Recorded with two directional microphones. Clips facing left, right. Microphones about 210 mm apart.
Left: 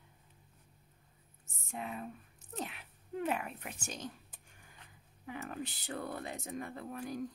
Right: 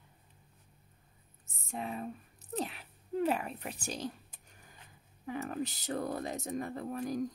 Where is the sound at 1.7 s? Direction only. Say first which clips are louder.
Right 3 dB; 35° right (ahead or behind).